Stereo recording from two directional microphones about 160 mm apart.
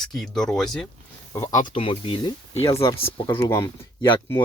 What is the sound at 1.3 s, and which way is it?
Speech, 20° left (ahead or behind).